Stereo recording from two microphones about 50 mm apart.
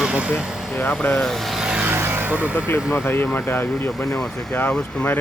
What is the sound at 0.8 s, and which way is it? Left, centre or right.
Speech, left.